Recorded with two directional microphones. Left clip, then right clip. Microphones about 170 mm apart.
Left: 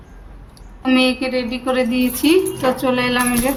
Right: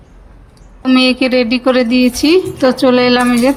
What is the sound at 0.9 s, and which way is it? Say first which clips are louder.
Speech: right 6 dB; 40° right (ahead or behind).